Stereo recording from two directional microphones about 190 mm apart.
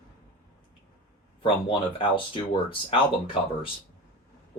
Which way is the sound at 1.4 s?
25° left (ahead or behind).